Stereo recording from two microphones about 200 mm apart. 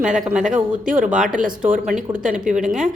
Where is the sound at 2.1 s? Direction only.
40° right (ahead or behind).